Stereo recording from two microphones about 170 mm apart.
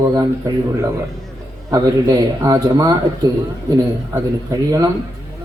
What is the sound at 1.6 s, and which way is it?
A man's voice, 20° right (ahead or behind).